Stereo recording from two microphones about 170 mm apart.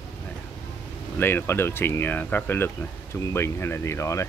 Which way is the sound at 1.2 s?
15° left (ahead or behind).